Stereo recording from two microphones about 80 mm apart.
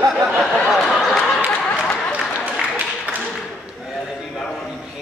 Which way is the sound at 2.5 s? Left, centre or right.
Centre.